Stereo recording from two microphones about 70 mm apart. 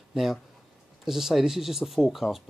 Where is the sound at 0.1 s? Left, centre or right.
Centre.